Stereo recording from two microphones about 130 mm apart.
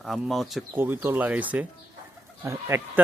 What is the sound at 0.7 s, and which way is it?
Speech, 15° right (ahead or behind).